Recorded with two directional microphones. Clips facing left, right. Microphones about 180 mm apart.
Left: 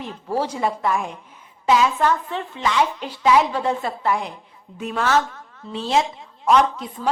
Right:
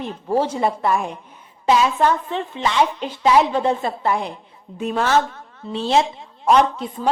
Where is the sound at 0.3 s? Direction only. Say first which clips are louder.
Right 3 dB; 25° right (ahead or behind).